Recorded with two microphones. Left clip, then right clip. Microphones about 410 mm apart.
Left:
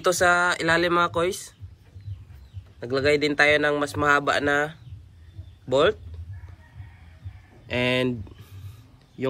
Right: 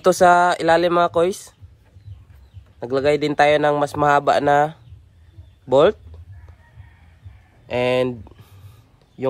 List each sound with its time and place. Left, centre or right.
0.0 s speech: centre
2.8 s speech: centre
7.6 s speech: centre